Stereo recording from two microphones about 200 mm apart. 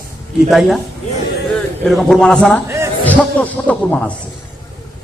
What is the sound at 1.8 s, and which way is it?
Speech, centre (ahead or behind).